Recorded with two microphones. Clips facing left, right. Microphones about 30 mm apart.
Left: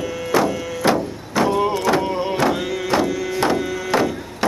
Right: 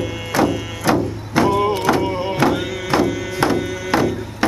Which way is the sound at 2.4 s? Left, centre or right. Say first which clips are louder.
Right 4 dB; centre.